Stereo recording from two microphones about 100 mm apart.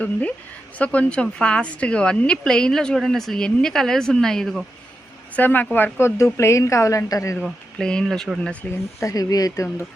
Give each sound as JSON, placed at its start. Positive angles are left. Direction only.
{"t": 0.0, "sound": "a woman's voice", "side_deg": 15}
{"t": 5.4, "sound": "a woman's voice", "side_deg": 20}
{"t": 7.4, "sound": "a woman's voice", "side_deg": 5}
{"t": 9.0, "sound": "speech", "side_deg": 35}